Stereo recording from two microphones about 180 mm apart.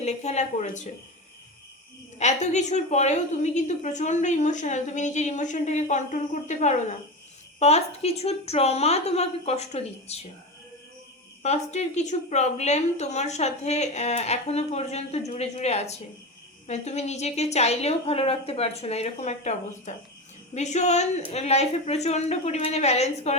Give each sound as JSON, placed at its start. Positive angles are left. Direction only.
{"t": 0.0, "sound": "a woman's voice", "side_deg": 40}
{"t": 2.1, "sound": "a woman's voice", "side_deg": 40}
{"t": 11.4, "sound": "a woman's voice", "side_deg": 40}